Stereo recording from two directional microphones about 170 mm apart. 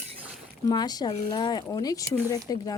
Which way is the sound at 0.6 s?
25° left (ahead or behind).